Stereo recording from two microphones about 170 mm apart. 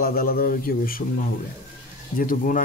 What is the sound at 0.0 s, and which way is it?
Speech, 60° left (ahead or behind).